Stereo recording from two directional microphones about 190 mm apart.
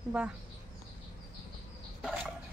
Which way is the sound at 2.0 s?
Centre (ahead or behind).